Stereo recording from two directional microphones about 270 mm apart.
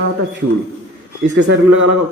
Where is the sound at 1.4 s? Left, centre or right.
Right.